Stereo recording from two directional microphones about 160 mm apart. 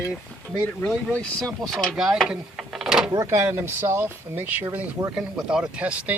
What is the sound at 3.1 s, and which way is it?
Speech, 20° right (ahead or behind).